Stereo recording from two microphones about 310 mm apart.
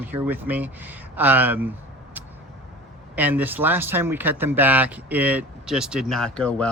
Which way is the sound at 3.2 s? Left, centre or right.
Centre.